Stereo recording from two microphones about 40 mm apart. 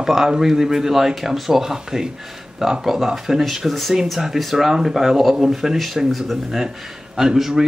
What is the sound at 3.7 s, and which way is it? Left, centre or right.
Speech, centre.